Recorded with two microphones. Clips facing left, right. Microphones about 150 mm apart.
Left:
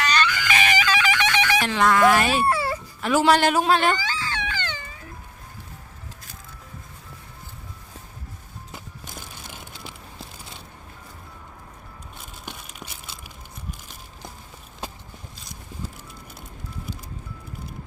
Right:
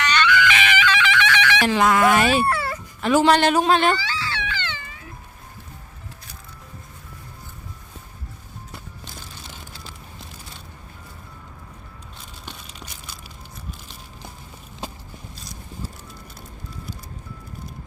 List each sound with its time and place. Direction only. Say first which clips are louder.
0.0 s music: right 4 dB; 35° left (ahead or behind)
1.6 s a man's voice: right 1 dB; 5° right (ahead or behind)
2.5 s dog: left 1 dB; 25° left (ahead or behind)
3.0 s a man's voice: right 2 dB; 5° left (ahead or behind)
3.9 s wail: right 1 dB; 45° left (ahead or behind)
12.5 s a sound: left 1 dB; 15° left (ahead or behind)